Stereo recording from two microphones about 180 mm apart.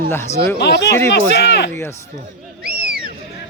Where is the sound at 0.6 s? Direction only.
70° left (ahead or behind).